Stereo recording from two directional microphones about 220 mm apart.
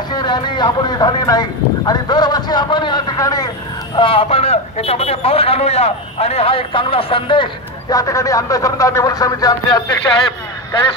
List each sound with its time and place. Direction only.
0.1 s a man's voice: 20° left (ahead or behind)